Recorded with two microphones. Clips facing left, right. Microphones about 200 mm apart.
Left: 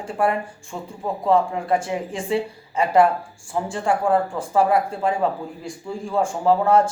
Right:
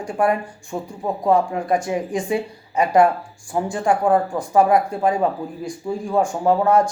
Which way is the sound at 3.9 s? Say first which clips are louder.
Right 2 dB; 15° right (ahead or behind).